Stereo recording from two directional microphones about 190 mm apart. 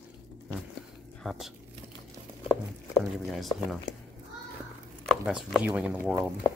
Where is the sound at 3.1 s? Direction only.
Centre (ahead or behind).